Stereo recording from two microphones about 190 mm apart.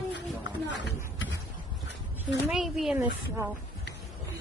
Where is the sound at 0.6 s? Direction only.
70° left (ahead or behind).